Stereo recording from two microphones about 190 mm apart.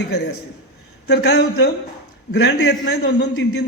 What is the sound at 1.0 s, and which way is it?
A man's voice, 65° left (ahead or behind).